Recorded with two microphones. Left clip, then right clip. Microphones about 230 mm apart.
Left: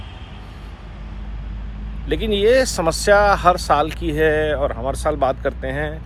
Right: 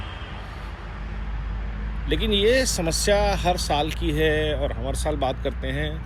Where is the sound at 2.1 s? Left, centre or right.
Left.